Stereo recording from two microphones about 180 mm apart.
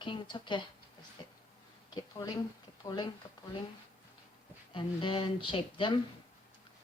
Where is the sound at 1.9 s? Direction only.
20° left (ahead or behind).